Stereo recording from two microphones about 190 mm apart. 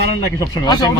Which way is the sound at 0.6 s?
20° left (ahead or behind).